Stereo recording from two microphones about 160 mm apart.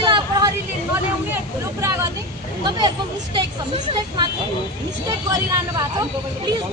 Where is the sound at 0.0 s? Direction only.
30° right (ahead or behind).